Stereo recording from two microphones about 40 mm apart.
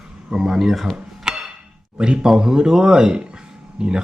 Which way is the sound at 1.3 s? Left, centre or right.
Centre.